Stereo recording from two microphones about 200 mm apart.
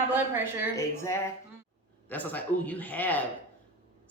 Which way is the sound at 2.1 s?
10° left (ahead or behind).